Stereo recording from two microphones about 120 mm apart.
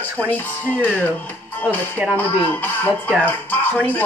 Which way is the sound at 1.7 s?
15° left (ahead or behind).